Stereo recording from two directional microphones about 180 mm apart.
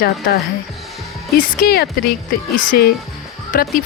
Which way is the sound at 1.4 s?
55° left (ahead or behind).